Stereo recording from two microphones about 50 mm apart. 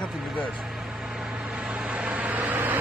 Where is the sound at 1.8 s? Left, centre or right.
Right.